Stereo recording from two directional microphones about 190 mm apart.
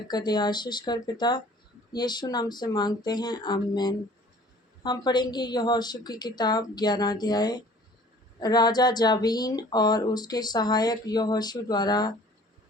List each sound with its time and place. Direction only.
0.1 s speech: 20° left (ahead or behind)